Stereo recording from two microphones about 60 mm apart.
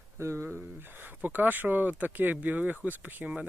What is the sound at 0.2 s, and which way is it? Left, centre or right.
Speech, right.